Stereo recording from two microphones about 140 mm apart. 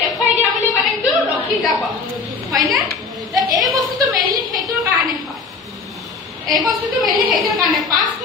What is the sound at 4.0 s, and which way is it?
Speech, 25° right (ahead or behind).